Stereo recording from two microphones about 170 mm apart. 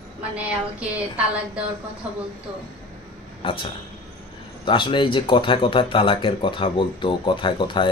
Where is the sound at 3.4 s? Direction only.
30° left (ahead or behind).